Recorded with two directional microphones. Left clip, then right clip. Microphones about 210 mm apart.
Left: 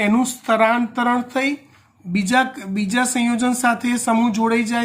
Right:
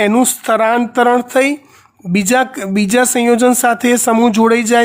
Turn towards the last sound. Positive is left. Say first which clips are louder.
# right 9 dB
turn(degrees=-55)  # may be behind; listen again after turning